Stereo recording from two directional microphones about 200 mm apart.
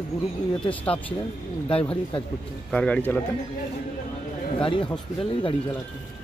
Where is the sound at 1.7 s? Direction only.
25° left (ahead or behind).